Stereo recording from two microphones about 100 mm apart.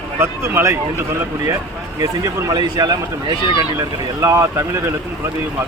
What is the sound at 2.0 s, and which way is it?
Speech, 40° right (ahead or behind).